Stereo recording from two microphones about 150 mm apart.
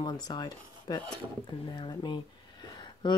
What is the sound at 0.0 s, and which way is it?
Speech, 30° left (ahead or behind).